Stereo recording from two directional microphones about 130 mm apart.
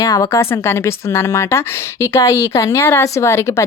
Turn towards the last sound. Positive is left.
turn(degrees=20)  # may be behind; listen again after turning